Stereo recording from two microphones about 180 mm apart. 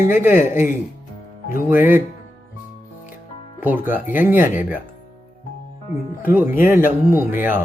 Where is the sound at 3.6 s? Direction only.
10° right (ahead or behind).